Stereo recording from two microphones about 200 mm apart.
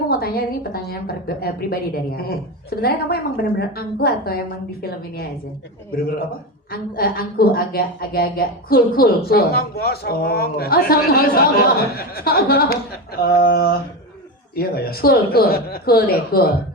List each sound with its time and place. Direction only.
0.1 s a woman's voice: 50° left (ahead or behind)
6.7 s a woman's voice: 45° left (ahead or behind)